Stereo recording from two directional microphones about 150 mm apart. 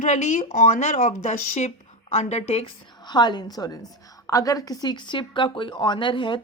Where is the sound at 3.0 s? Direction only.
30° left (ahead or behind).